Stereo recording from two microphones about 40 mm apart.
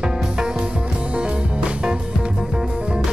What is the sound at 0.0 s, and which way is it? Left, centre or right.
Music, centre.